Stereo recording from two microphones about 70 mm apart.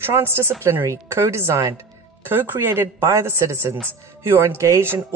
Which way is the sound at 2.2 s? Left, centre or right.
Right.